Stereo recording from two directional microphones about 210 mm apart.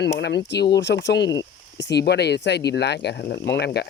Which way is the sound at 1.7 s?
55° left (ahead or behind).